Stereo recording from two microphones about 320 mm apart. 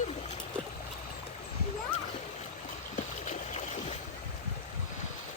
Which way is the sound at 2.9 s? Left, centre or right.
Left.